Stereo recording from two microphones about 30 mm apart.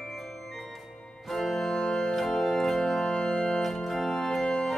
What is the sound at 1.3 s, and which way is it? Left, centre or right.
Organ, centre.